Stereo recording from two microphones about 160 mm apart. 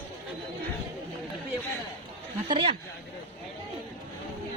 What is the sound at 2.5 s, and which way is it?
Speech, 30° right (ahead or behind).